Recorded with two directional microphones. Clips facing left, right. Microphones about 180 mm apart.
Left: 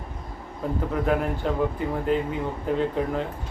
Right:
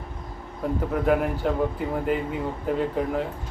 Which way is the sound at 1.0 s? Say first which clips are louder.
Right 3 dB; 5° right (ahead or behind).